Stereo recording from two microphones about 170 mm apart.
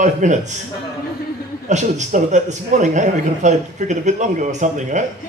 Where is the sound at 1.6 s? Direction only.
45° right (ahead or behind).